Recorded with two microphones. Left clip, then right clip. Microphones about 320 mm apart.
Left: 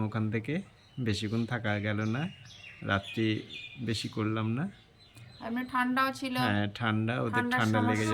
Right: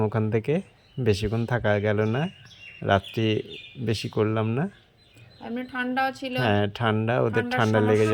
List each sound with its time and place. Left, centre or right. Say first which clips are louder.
0.0 s speech: right 9 dB; centre
5.5 s a woman's voice: right 2 dB; centre
6.4 s speech: right 8 dB; centre